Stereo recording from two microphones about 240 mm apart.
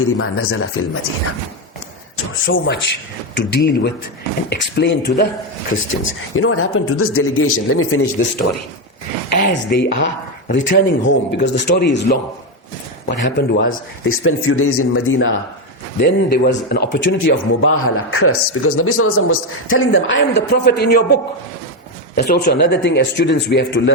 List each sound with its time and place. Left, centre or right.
0.0 s a man's voice: left
2.1 s a man's voice: left
9.3 s speech: left
13.2 s a man's voice: left
16.0 s speech: left
22.2 s speech: left